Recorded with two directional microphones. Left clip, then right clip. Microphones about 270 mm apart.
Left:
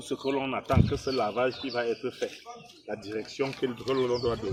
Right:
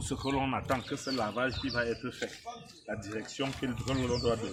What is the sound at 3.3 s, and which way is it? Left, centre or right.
Speech, centre.